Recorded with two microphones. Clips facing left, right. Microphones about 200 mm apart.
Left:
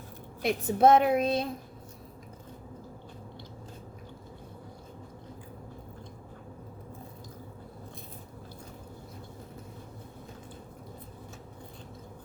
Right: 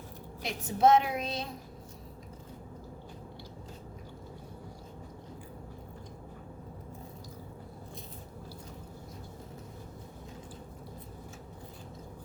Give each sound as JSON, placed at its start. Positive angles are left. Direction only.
{"t": 0.4, "sound": "a woman's voice", "side_deg": 55}